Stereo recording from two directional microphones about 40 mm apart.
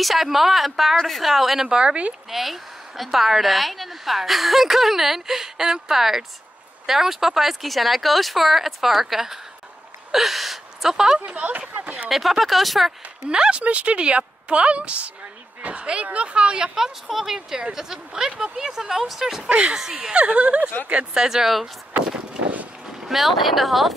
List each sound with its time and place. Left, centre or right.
0.0 s speech: centre
1.7 s a woman's voice: right
2.2 s speech: centre
11.1 s speech: right
12.1 s speech: centre
13.3 s a woman's voice: right
16.8 s speech: centre
20.2 s speech: right; by 21.6 s centre
23.0 s speech: centre